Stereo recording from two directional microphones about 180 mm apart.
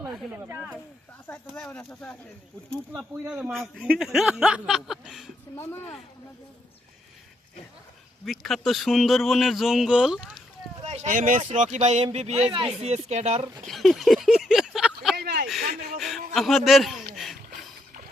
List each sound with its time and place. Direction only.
0.1 s speech: 5° right (ahead or behind)
1.5 s a man's voice: 5° left (ahead or behind)
5.5 s speech: 10° left (ahead or behind)
8.2 s a man's voice: centre (ahead or behind)
10.8 s speech: 40° right (ahead or behind)
13.7 s a sound: centre (ahead or behind)
15.1 s a sound: 60° right (ahead or behind)
16.0 s a sound: centre (ahead or behind)
16.3 s a man's voice: centre (ahead or behind)